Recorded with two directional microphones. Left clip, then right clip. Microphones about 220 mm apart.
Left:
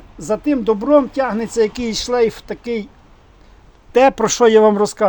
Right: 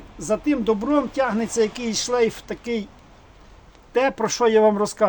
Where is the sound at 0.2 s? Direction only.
35° left (ahead or behind).